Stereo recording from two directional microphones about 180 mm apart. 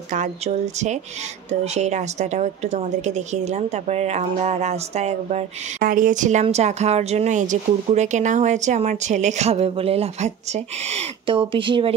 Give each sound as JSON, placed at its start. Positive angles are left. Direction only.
{"t": 0.1, "sound": "a woman's voice", "side_deg": -40}